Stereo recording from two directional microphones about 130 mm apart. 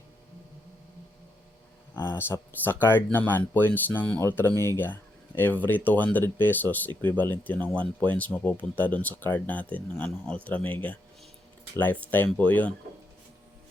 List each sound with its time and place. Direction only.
2.0 s speech: 15° left (ahead or behind)